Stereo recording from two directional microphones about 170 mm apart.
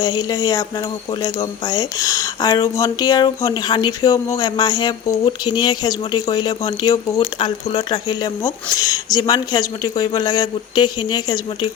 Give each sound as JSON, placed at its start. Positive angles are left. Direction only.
{"t": 0.0, "sound": "speech", "side_deg": 25}
{"t": 8.2, "sound": "speech", "side_deg": 20}